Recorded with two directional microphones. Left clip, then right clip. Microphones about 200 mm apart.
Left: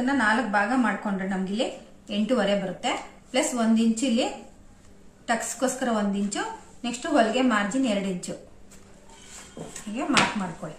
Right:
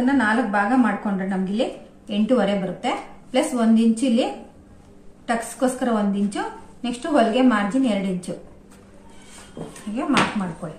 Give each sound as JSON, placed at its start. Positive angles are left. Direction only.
{"t": 0.0, "sound": "a woman's voice", "side_deg": 0}
{"t": 9.6, "sound": "speech", "side_deg": 15}
{"t": 9.9, "sound": "speech", "side_deg": 5}